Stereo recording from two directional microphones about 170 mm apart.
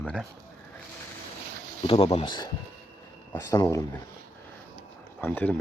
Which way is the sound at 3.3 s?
15° left (ahead or behind).